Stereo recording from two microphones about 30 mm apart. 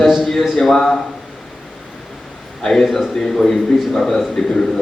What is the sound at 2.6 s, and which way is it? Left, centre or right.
A man's voice, centre.